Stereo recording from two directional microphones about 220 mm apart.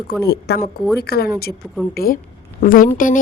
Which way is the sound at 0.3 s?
45° left (ahead or behind).